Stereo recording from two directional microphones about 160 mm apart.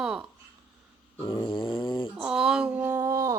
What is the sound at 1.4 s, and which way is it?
Snoring, 30° left (ahead or behind).